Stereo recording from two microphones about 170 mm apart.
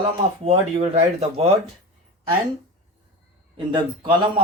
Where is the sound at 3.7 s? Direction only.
30° right (ahead or behind).